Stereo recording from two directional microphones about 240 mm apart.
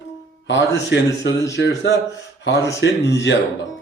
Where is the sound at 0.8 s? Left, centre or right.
Left.